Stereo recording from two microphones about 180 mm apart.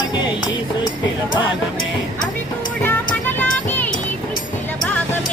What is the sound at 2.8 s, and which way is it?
Music, 10° left (ahead or behind).